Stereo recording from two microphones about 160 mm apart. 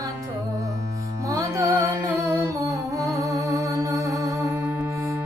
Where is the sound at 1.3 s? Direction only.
20° right (ahead or behind).